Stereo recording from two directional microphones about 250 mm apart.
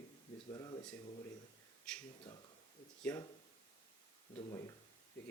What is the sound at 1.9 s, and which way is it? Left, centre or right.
Speech, centre.